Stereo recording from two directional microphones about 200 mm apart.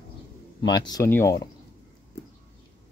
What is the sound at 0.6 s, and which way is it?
Speech, 20° left (ahead or behind).